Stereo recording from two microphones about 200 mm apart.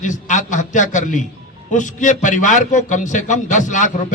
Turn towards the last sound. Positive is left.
turn(degrees=40)  # may be behind; listen again after turning